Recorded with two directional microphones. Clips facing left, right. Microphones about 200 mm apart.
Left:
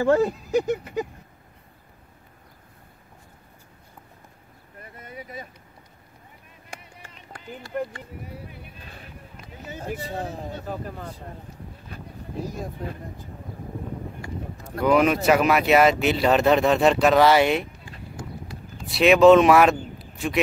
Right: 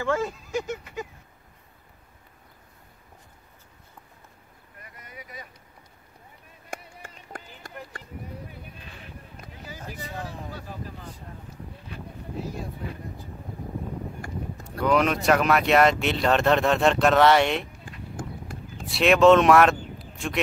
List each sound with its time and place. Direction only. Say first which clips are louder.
0.0 s speech: left 7 dB; 35° left (ahead or behind)
4.8 s a sound: left 6 dB; 30° left (ahead or behind)
6.7 s music: right 4 dB; 50° right (ahead or behind)
9.9 s speech: left 5 dB; 30° left (ahead or behind)
10.7 s speech: left 6 dB; 55° left (ahead or behind)
14.9 s speech: left 3 dB; 5° left (ahead or behind)
18.1 s run: right 1 dB; 50° right (ahead or behind)
18.9 s speech: left 3 dB; centre (ahead or behind)